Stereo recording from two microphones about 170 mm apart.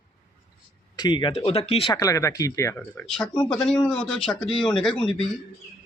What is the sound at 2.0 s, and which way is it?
Speech, 20° left (ahead or behind).